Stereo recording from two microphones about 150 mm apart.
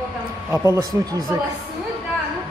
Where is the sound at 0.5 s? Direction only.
20° right (ahead or behind).